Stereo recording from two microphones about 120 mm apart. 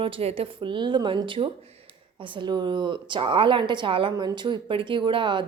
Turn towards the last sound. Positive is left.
turn(degrees=-45)  # may be behind; listen again after turning